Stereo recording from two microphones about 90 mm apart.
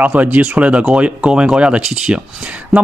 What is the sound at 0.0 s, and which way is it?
Speech, 15° right (ahead or behind).